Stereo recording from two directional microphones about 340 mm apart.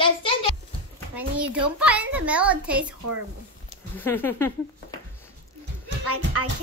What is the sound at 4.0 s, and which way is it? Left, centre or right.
Speech, centre.